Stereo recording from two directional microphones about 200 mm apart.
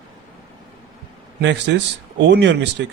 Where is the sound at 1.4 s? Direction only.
60° right (ahead or behind).